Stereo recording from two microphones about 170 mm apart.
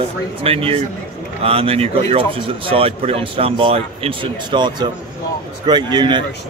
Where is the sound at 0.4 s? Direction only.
35° right (ahead or behind).